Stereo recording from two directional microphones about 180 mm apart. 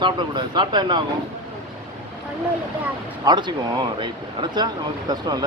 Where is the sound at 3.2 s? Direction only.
25° right (ahead or behind).